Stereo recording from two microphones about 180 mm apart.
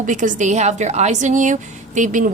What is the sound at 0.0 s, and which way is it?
A woman's voice, 45° right (ahead or behind).